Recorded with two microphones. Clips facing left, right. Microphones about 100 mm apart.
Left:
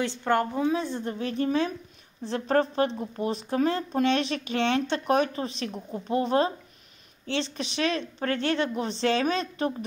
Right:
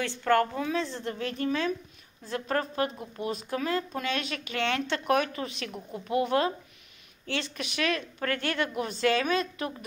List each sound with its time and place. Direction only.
0.0 s a woman's voice: 20° left (ahead or behind)